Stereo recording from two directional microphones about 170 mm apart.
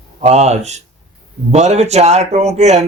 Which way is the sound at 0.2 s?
40° right (ahead or behind).